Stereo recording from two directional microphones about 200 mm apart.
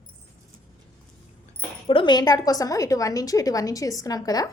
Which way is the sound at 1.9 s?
25° left (ahead or behind).